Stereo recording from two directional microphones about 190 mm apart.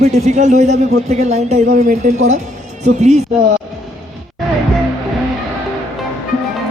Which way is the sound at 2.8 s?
35° right (ahead or behind).